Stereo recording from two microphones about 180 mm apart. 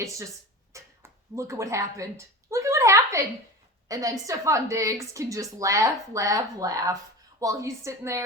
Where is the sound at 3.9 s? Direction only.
20° right (ahead or behind).